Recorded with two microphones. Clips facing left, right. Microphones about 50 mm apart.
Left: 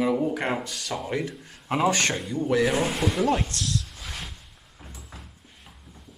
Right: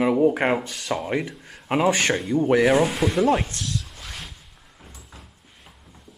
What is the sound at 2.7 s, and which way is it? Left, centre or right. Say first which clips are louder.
Speech: right 4 dB; centre.